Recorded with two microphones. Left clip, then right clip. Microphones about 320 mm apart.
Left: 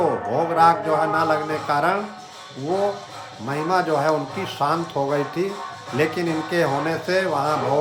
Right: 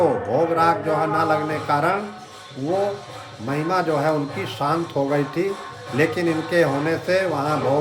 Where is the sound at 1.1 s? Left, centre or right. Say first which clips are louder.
Even; centre.